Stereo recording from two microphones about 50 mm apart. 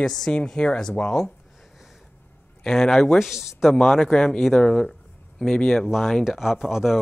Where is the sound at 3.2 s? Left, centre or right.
Centre.